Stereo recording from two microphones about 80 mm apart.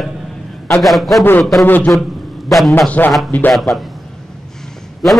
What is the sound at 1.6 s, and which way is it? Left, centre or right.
Speech, left.